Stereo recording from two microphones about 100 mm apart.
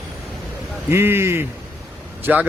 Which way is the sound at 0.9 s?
25° right (ahead or behind).